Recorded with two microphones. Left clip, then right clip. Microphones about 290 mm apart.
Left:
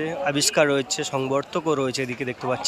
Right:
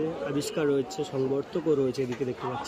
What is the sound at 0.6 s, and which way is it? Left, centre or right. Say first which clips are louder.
Speech: left 6 dB; left.